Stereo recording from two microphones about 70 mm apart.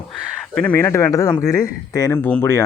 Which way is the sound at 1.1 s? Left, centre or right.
Left.